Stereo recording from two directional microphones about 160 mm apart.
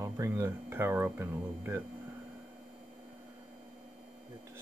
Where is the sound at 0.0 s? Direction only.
20° right (ahead or behind).